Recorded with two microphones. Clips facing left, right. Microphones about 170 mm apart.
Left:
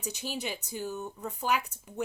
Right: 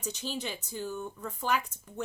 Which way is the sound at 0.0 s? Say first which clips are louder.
Even; 10° left (ahead or behind).